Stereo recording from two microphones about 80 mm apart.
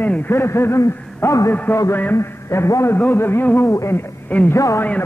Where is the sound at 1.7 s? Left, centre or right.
Left.